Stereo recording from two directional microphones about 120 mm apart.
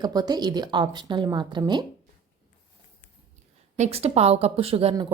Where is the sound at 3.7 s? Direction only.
65° right (ahead or behind).